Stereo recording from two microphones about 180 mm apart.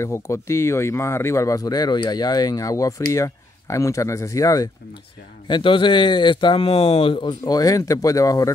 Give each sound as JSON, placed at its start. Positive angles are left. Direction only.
{"t": 0.0, "sound": "speech", "side_deg": 15}